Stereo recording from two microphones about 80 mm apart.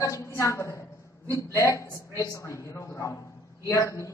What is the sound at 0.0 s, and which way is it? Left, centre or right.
A man's voice, left.